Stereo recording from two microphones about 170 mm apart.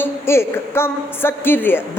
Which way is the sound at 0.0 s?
15° left (ahead or behind).